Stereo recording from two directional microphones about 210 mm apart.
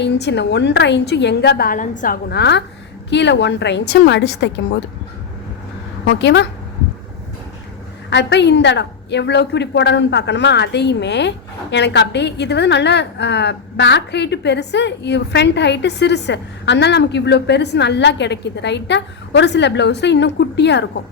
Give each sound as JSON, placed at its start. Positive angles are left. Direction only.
{"t": 0.0, "sound": "a woman's voice", "side_deg": 55}
{"t": 6.1, "sound": "a woman's voice", "side_deg": 55}
{"t": 8.1, "sound": "a woman's voice", "side_deg": 55}